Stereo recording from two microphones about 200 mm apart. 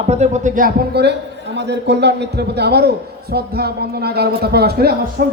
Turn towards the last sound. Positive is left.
turn(degrees=-50)  # may be behind; listen again after turning